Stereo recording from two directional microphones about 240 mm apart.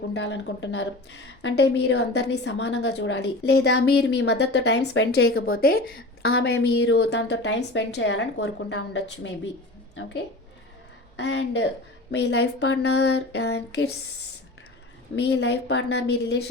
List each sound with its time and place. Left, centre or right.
0.1 s a woman's voice: left
11.2 s a woman's voice: left
15.1 s a woman's voice: left